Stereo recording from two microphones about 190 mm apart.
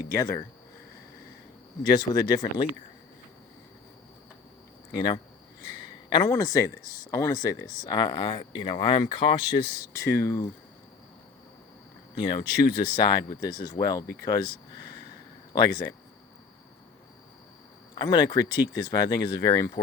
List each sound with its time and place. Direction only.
0.1 s speech: 20° left (ahead or behind)
1.8 s speech: 20° left (ahead or behind)
4.9 s speech: 20° left (ahead or behind)
12.8 s speech: 25° left (ahead or behind)
15.5 s speech: 20° left (ahead or behind)
17.9 s speech: 20° left (ahead or behind)